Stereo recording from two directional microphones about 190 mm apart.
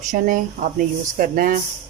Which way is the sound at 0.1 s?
45° right (ahead or behind).